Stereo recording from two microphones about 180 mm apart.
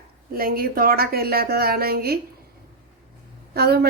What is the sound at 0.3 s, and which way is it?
Speech, 55° right (ahead or behind).